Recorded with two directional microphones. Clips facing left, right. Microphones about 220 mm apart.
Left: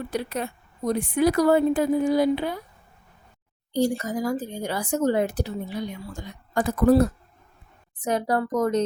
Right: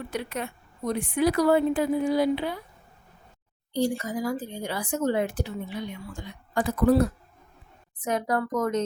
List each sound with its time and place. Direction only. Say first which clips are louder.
0.1 s speech: left 3 dB; 35° left (ahead or behind)
3.7 s speech: left 3 dB; 45° left (ahead or behind)
8.0 s speech: left 2 dB; 35° left (ahead or behind)